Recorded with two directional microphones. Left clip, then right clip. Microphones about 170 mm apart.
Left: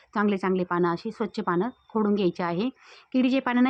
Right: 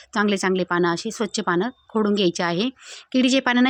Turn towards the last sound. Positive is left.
turn(degrees=-20)  # may be behind; listen again after turning